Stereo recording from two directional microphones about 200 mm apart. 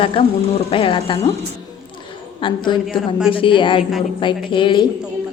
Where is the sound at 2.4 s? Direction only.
25° left (ahead or behind).